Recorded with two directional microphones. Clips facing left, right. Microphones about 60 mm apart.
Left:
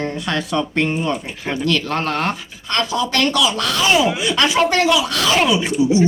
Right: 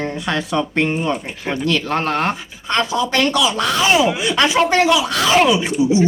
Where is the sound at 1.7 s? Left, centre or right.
Centre.